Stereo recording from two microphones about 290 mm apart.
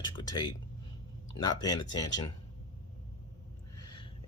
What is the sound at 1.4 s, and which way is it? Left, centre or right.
Speech, centre.